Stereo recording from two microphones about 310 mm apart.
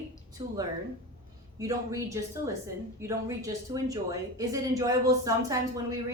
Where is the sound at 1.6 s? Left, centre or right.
Centre.